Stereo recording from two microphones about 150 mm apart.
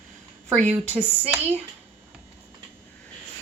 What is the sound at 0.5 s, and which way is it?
Speech, 10° left (ahead or behind).